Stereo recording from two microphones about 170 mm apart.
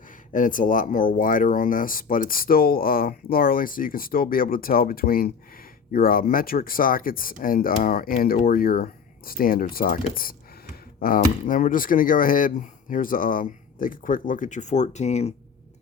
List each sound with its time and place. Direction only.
0.3 s speech: 50° left (ahead or behind)